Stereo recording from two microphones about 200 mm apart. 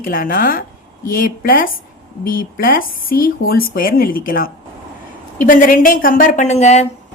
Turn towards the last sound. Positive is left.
turn(degrees=35)  # may be behind; listen again after turning